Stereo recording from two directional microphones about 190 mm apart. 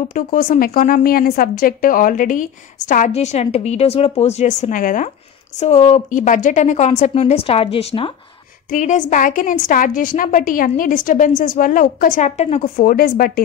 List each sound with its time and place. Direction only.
0.1 s a woman's voice: 45° left (ahead or behind); by 8.1 s 30° left (ahead or behind)
8.6 s a woman's voice: 40° left (ahead or behind)